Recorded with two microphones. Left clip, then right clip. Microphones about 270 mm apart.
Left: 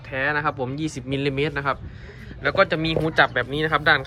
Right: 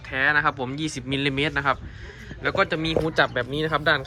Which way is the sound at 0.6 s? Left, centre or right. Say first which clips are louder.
Left 1 dB; centre.